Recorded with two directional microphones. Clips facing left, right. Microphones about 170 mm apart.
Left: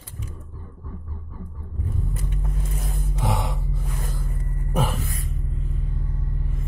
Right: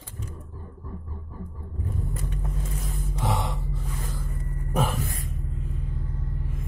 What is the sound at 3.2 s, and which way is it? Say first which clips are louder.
Gasp: left 1 dB; 10° left (ahead or behind).